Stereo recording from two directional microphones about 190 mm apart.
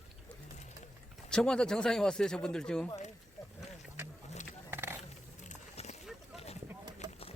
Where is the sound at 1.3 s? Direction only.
5° left (ahead or behind).